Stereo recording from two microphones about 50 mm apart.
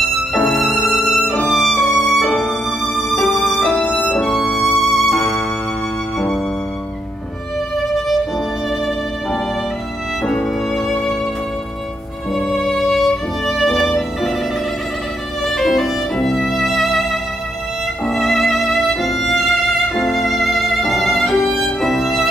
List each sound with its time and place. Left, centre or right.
0.0 s violin: centre
1.5 s music: centre
3.7 s music: centre
4.2 s music: centre
8.6 s music: centre
12.3 s music: centre
15.4 s violin: centre
18.0 s music: centre